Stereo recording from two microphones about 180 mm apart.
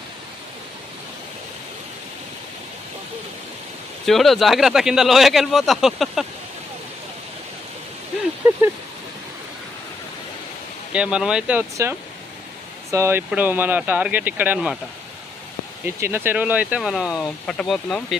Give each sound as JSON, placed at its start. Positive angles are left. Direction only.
{"t": 4.0, "sound": "speech", "side_deg": 0}
{"t": 10.9, "sound": "speech", "side_deg": -5}
{"t": 15.8, "sound": "speech", "side_deg": -10}